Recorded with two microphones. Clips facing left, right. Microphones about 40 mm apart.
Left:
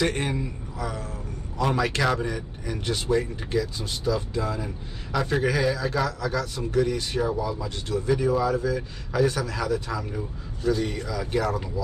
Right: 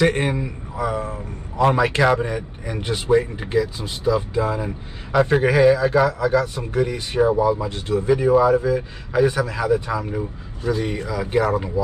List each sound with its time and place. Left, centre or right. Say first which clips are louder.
0.0 s a man's voice: right 6 dB; right